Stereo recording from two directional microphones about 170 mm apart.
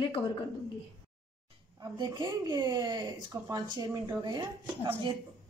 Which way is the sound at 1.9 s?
25° right (ahead or behind).